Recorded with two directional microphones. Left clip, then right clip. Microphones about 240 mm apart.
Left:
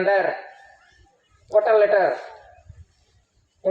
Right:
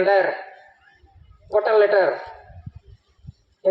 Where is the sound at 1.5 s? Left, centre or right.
Right.